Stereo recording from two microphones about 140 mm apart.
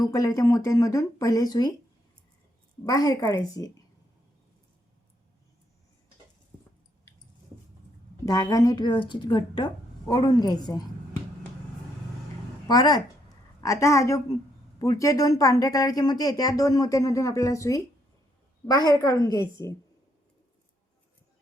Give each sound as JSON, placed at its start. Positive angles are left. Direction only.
{"t": 0.0, "sound": "speech", "side_deg": 25}
{"t": 2.8, "sound": "speech", "side_deg": 30}
{"t": 8.2, "sound": "speech", "side_deg": 25}
{"t": 12.6, "sound": "speech", "side_deg": 30}